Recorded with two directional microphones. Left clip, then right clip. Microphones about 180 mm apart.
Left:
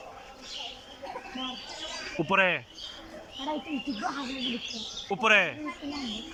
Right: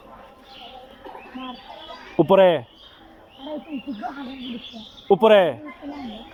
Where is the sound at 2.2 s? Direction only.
40° right (ahead or behind).